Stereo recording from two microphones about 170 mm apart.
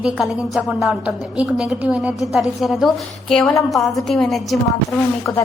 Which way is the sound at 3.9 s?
Centre (ahead or behind).